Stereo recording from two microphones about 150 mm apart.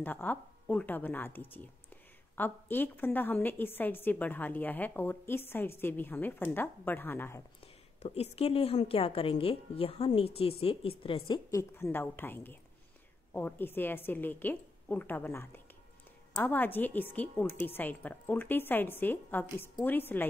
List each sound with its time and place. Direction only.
0.0 s a woman's voice: 10° left (ahead or behind)
7.6 s a woman's voice: 45° left (ahead or behind)
11.7 s a woman's voice: 15° left (ahead or behind)